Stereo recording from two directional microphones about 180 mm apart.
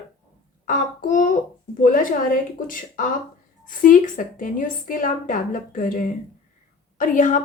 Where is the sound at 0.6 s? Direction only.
45° left (ahead or behind).